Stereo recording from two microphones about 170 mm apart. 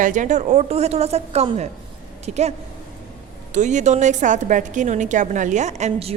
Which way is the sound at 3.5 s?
45° right (ahead or behind).